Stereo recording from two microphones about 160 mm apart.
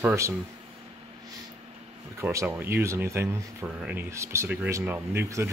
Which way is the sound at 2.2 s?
15° right (ahead or behind).